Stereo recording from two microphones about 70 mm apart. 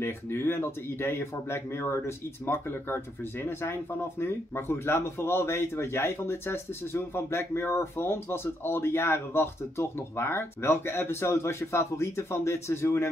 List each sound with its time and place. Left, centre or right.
0.0 s speech: left